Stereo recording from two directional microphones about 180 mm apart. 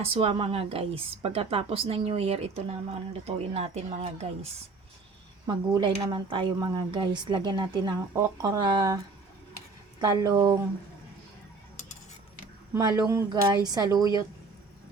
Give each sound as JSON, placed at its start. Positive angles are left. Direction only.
{"t": 0.0, "sound": "a woman's voice", "side_deg": -30}
{"t": 5.5, "sound": "speech", "side_deg": -25}
{"t": 10.0, "sound": "speech", "side_deg": -20}
{"t": 12.8, "sound": "speech", "side_deg": -20}